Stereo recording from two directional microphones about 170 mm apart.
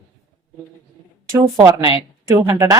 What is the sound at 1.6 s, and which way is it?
A woman's voice, 20° right (ahead or behind).